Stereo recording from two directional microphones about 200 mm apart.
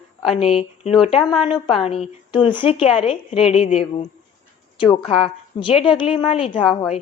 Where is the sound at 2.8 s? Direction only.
5° right (ahead or behind).